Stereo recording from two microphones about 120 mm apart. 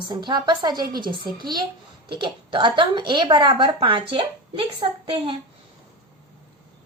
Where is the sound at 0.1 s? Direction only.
40° right (ahead or behind).